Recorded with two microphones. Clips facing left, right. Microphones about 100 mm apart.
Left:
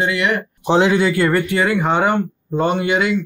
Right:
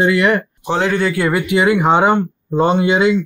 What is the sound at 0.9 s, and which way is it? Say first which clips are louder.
Speech: left 1 dB; centre (ahead or behind).